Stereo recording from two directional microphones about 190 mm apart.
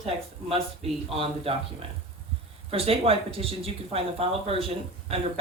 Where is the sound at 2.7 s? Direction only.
30° right (ahead or behind).